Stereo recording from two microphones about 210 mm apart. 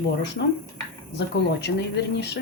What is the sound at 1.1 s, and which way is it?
Speech, 55° left (ahead or behind).